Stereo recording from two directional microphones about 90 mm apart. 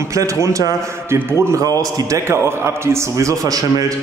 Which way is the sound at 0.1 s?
35° right (ahead or behind).